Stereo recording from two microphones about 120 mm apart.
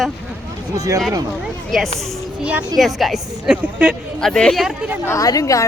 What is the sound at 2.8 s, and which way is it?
A woman's voice, centre (ahead or behind).